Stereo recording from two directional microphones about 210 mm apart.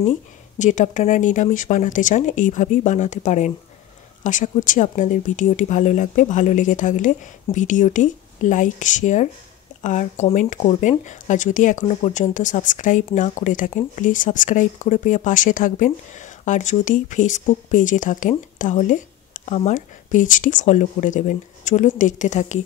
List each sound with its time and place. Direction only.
0.6 s speech: 35° left (ahead or behind)